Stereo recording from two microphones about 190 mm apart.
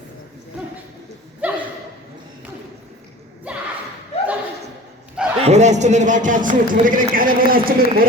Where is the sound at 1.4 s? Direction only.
10° right (ahead or behind).